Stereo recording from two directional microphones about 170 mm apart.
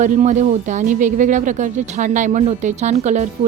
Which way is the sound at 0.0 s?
45° right (ahead or behind).